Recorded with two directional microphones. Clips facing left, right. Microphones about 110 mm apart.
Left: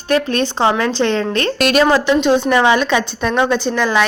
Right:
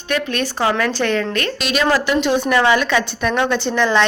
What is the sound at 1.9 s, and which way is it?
A woman's voice, 20° left (ahead or behind).